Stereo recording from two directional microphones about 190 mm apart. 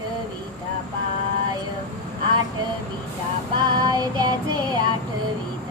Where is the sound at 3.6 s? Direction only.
20° right (ahead or behind).